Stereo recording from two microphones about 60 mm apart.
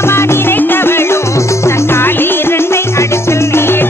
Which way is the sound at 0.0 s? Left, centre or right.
Left.